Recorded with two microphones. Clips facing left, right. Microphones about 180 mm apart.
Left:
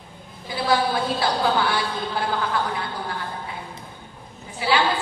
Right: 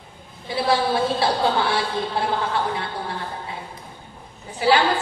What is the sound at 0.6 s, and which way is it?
A woman's voice, 25° right (ahead or behind).